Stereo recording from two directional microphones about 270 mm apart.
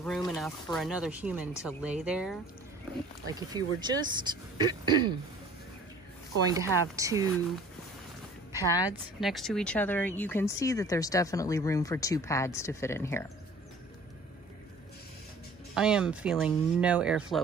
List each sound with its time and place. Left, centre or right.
0.0 s speech: centre
3.3 s speech: centre
6.5 s speech: centre
8.5 s speech: centre
9.2 s speech: centre
15.7 s speech: centre